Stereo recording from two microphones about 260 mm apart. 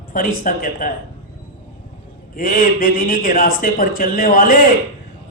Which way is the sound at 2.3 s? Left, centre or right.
Left.